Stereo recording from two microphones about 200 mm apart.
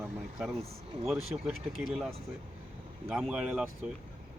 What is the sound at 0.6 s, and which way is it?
Speech, 30° right (ahead or behind).